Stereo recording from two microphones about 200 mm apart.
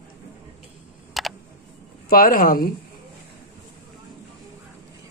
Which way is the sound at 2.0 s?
45° left (ahead or behind).